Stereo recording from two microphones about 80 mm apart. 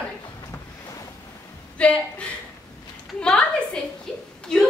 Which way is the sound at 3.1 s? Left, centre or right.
Centre.